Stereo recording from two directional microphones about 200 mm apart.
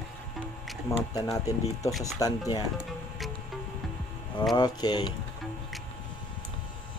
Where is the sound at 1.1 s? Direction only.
15° left (ahead or behind).